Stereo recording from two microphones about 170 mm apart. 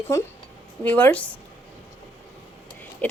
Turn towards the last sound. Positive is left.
turn(degrees=10)  # may be behind; listen again after turning